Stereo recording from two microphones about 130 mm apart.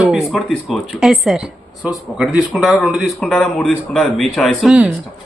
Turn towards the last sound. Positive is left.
turn(degrees=-5)  # may be behind; listen again after turning